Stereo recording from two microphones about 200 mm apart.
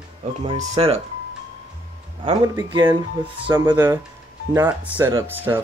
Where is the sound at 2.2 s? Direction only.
20° right (ahead or behind).